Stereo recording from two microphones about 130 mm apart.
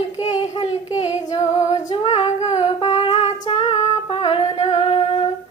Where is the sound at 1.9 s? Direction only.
40° left (ahead or behind).